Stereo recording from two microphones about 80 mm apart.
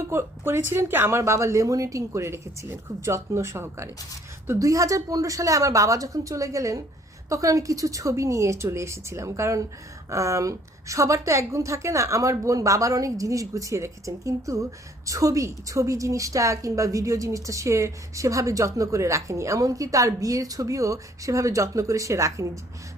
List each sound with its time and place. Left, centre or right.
0.1 s a woman's voice: right